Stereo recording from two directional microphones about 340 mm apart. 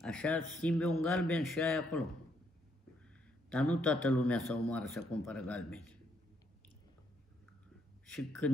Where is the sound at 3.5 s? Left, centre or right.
Centre.